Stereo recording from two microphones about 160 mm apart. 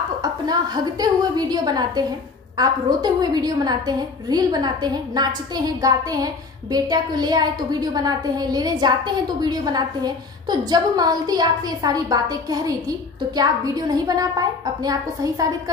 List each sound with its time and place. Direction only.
0.2 s a woman's voice: 25° right (ahead or behind)